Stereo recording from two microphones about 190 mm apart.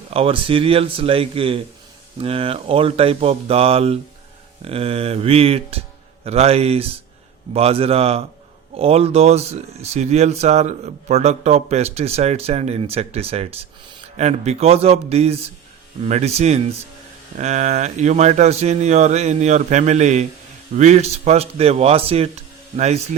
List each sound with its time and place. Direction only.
0.1 s speech: 30° right (ahead or behind)